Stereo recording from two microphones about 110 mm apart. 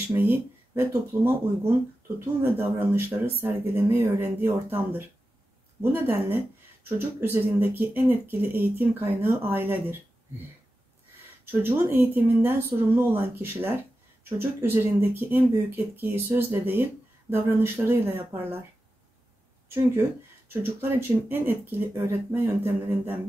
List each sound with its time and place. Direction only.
0.1 s speech: 20° right (ahead or behind)
11.5 s speech: 20° right (ahead or behind)
19.7 s speech: 20° right (ahead or behind)